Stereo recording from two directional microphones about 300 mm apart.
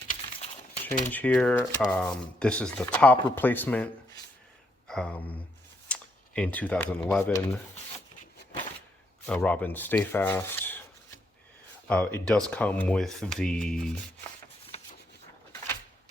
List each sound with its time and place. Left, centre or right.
0.1 s a sound: centre
1.1 s speech: centre
9.2 s speech: centre
11.9 s speech: centre